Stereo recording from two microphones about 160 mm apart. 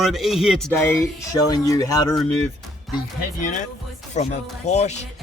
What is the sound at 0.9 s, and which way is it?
Speech, 20° left (ahead or behind).